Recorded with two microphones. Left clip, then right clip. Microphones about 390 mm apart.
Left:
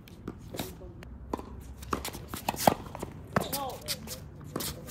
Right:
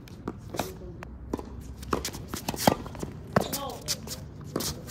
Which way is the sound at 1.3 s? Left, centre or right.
Left.